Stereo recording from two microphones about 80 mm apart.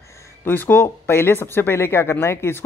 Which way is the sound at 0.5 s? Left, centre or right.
Left.